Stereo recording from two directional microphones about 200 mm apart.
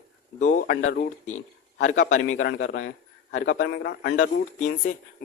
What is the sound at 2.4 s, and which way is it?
A man's voice, 60° left (ahead or behind).